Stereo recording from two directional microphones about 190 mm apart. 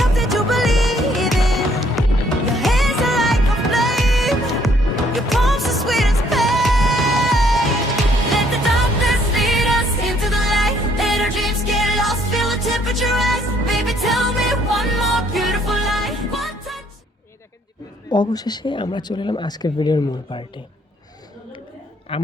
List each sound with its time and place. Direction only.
0.0 s music: centre (ahead or behind)
18.1 s speech: 20° left (ahead or behind)
22.1 s speech: 30° left (ahead or behind)